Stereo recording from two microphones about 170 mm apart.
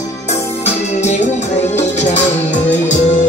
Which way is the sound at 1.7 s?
40° left (ahead or behind).